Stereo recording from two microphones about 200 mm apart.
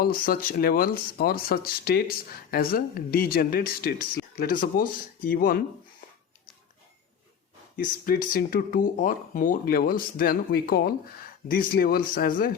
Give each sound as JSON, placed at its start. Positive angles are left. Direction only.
{"t": 0.0, "sound": "speech", "side_deg": 45}
{"t": 7.8, "sound": "speech", "side_deg": 45}